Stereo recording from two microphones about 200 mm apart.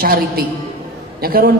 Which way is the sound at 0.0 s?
50° right (ahead or behind).